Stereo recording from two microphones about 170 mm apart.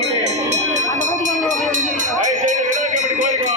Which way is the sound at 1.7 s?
50° right (ahead or behind).